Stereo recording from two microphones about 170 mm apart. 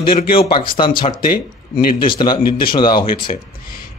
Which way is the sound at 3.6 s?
60° left (ahead or behind).